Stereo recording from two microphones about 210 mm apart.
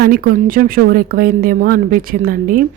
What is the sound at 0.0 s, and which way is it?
A woman's voice, 45° right (ahead or behind).